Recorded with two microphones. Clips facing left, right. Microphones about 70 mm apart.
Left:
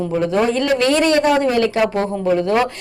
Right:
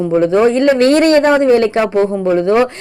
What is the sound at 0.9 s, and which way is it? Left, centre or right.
Speech, right.